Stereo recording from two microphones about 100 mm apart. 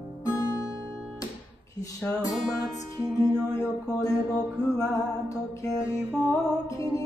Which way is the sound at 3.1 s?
35° left (ahead or behind).